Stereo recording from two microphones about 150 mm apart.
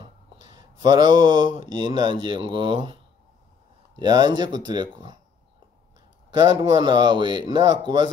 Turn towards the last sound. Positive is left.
turn(degrees=-30)  # may be behind; listen again after turning